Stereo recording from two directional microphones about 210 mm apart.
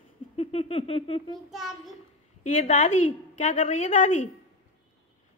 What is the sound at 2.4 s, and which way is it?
A woman's voice, 35° left (ahead or behind).